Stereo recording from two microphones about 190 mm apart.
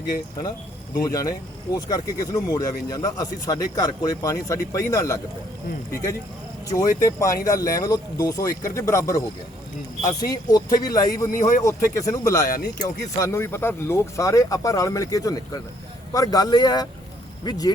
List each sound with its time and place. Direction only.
1.0 s speech: 20° left (ahead or behind)
11.3 s speech: 45° left (ahead or behind)
11.6 s speech: 15° left (ahead or behind)
12.5 s speech: 50° left (ahead or behind)
12.8 s speech: 15° left (ahead or behind)